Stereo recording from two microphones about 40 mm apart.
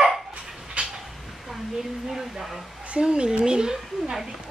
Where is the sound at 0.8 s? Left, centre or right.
Right.